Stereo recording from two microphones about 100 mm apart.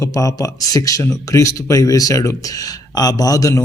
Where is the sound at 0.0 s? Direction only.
35° left (ahead or behind).